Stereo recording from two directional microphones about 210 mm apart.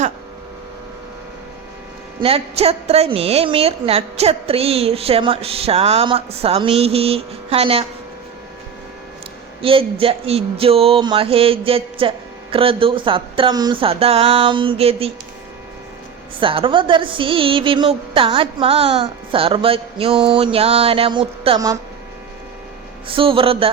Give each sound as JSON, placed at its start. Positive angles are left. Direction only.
{"t": 2.2, "sound": "a woman's voice", "side_deg": -30}
{"t": 9.6, "sound": "a woman's voice", "side_deg": -25}
{"t": 16.4, "sound": "a woman's voice", "side_deg": -25}
{"t": 23.0, "sound": "a woman's voice", "side_deg": -25}